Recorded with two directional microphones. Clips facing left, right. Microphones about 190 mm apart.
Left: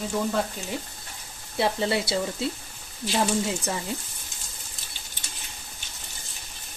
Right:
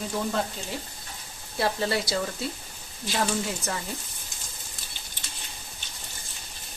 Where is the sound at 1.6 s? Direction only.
25° left (ahead or behind).